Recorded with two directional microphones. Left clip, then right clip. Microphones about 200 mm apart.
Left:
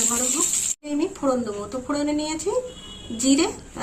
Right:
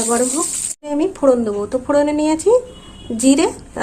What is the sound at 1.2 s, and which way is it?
Speech, 50° right (ahead or behind).